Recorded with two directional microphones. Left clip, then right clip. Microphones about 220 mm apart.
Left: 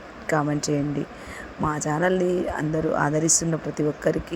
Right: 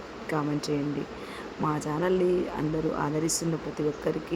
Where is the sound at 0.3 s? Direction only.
20° left (ahead or behind).